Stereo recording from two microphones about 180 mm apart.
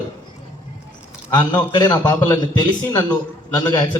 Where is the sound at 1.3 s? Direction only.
25° left (ahead or behind).